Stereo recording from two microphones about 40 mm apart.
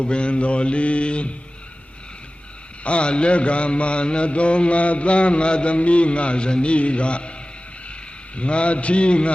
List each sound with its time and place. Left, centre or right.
0.0 s mantra: left
2.8 s mantra: left
8.4 s mantra: left